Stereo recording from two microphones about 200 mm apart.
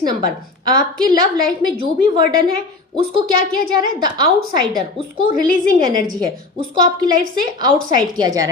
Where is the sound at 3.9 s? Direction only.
20° right (ahead or behind).